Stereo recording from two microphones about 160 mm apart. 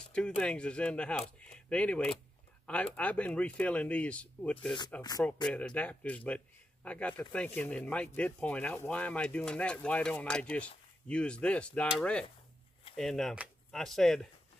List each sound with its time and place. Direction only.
0.4 s a man's voice: 5° left (ahead or behind)